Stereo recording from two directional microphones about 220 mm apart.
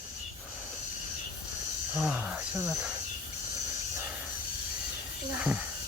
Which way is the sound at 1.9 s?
5° right (ahead or behind).